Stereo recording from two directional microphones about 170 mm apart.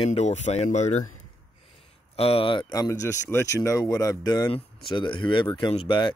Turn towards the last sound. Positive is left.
turn(degrees=30)  # may be behind; listen again after turning